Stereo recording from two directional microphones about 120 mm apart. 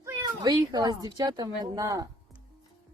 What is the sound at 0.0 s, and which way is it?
Speech, 30° right (ahead or behind).